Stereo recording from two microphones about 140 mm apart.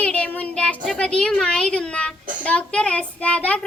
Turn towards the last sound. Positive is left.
turn(degrees=10)  # may be behind; listen again after turning